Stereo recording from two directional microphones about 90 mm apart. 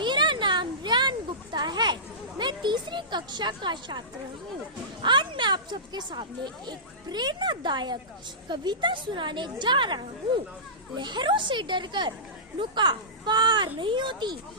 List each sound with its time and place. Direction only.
0.0 s a sound: 60° right (ahead or behind)
2.4 s a woman's voice: 55° right (ahead or behind)
5.0 s a woman's voice: 60° right (ahead or behind)